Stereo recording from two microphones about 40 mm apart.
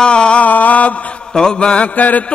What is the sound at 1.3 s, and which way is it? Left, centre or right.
Music, left.